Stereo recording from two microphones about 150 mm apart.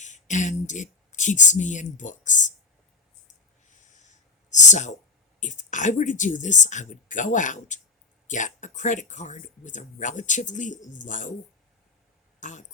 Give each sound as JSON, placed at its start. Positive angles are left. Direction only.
{"t": 0.0, "sound": "speech", "side_deg": 55}
{"t": 3.7, "sound": "a sound", "side_deg": 55}
{"t": 4.5, "sound": "speech", "side_deg": 50}
{"t": 12.4, "sound": "speech", "side_deg": 55}